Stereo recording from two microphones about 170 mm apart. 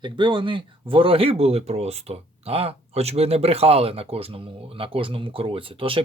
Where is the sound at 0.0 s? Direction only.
30° right (ahead or behind).